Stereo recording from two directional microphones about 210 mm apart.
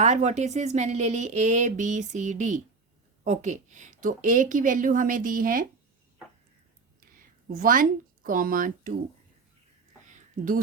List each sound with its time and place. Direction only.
0.0 s speech: 35° right (ahead or behind)
7.0 s speech: 40° right (ahead or behind)
10.1 s a sound: 40° right (ahead or behind)